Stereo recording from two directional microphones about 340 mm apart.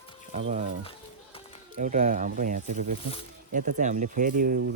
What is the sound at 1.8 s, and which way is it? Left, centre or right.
Speech, right.